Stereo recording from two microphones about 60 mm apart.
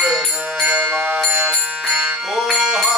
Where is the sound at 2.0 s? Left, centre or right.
Centre.